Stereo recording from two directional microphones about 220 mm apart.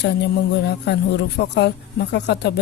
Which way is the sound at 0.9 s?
50° left (ahead or behind).